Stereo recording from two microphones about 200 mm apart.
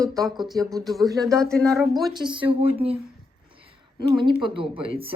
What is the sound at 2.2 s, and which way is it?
Speech, 25° right (ahead or behind).